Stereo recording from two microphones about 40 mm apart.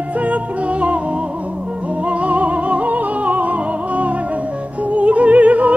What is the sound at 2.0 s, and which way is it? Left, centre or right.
Music, right.